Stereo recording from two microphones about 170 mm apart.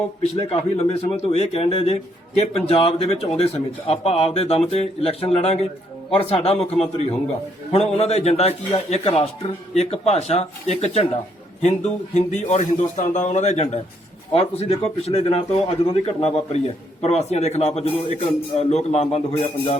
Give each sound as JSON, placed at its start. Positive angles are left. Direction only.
{"t": 0.2, "sound": "a man's voice", "side_deg": 40}